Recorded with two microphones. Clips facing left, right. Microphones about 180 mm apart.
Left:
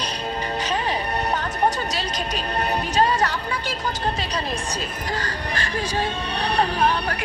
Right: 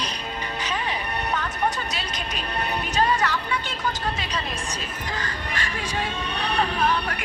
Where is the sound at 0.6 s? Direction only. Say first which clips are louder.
Left 3 dB; 35° left (ahead or behind).